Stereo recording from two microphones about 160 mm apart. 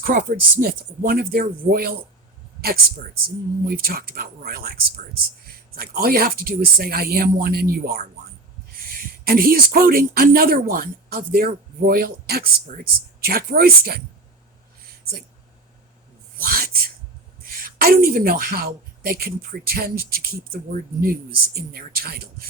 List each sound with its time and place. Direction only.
0.0 s speech: 60° right (ahead or behind)
3.2 s speech: 65° right (ahead or behind)
16.4 s a sound: 65° right (ahead or behind)
17.6 s speech: 65° right (ahead or behind)